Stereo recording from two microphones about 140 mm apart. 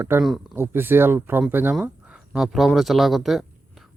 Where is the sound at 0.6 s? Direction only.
15° right (ahead or behind).